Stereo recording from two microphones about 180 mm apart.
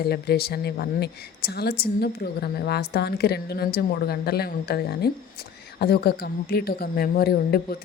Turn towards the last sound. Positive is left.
turn(degrees=60)  # may be behind; listen again after turning